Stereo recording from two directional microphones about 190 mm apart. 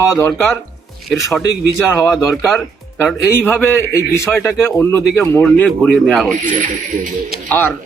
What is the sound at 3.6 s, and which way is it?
A man's voice, 10° left (ahead or behind).